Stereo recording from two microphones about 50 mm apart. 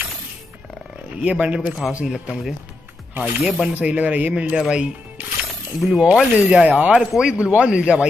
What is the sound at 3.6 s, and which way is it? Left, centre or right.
Speech, right.